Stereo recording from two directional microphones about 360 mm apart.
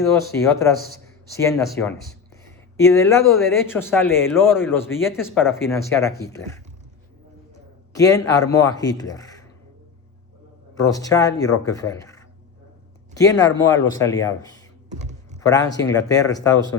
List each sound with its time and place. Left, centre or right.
0.0 s speech: centre
10.8 s speech: centre
13.1 s speech: centre
13.7 s speech: left
13.9 s speech: centre
14.8 s computer keyboard: centre
15.4 s speech: centre